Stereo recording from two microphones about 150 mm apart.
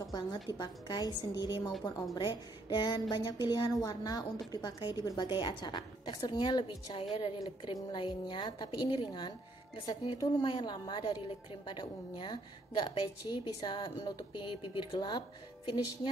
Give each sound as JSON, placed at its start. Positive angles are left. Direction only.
{"t": 0.0, "sound": "a woman's voice", "side_deg": 25}